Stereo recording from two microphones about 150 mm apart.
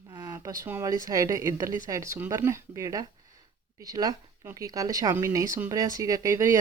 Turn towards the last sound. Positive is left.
turn(degrees=-20)  # may be behind; listen again after turning